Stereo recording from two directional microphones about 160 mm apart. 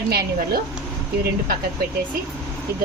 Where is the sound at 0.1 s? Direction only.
70° right (ahead or behind).